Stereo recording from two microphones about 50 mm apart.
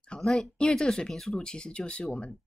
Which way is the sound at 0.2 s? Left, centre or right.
Centre.